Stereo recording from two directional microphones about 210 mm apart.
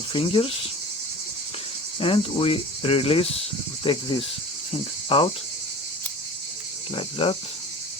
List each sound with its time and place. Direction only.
0.1 s cricket: 25° left (ahead or behind)
2.0 s cricket: 25° left (ahead or behind)
5.0 s cricket: 25° left (ahead or behind)
6.9 s cricket: 25° left (ahead or behind)